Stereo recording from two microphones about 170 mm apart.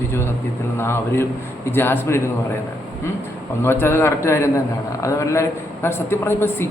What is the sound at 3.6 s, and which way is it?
A man's voice, 15° left (ahead or behind).